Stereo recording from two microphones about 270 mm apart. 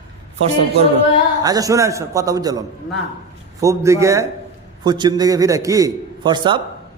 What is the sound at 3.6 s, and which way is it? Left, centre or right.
A man's voice, centre.